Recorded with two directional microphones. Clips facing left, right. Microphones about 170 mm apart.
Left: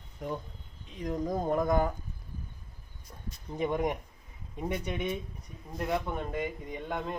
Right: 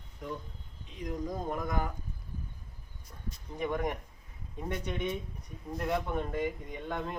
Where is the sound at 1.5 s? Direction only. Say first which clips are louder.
Left 10 dB; 35° left (ahead or behind).